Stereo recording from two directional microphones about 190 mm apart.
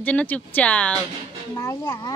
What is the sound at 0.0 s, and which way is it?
Speech, 10° left (ahead or behind).